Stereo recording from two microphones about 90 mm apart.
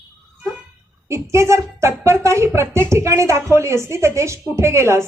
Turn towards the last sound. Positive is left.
turn(degrees=-30)  # may be behind; listen again after turning